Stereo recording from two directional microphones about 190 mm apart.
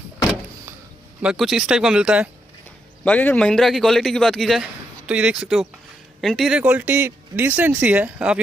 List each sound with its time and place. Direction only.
1.2 s a man's voice: centre (ahead or behind)
3.0 s a man's voice: 10° left (ahead or behind)